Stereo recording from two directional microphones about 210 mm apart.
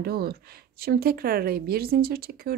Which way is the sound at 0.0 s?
45° right (ahead or behind).